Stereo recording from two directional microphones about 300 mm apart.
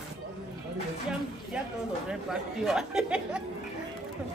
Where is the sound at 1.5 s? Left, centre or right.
Centre.